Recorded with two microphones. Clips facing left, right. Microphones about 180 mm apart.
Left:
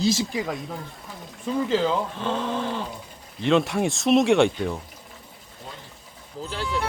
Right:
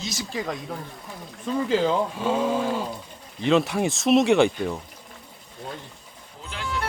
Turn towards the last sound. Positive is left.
turn(degrees=35)  # may be behind; listen again after turning